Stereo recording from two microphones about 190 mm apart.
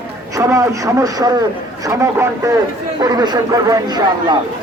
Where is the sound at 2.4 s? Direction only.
15° right (ahead or behind).